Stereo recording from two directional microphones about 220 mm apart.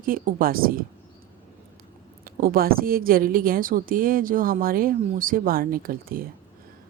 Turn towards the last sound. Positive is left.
turn(degrees=-40)  # may be behind; listen again after turning